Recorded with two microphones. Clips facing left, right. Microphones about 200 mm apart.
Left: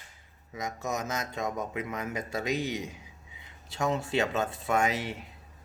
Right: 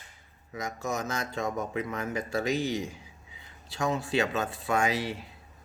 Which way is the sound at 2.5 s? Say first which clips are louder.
Right 1 dB; 30° right (ahead or behind).